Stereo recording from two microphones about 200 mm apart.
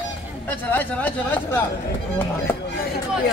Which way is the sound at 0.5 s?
10° left (ahead or behind).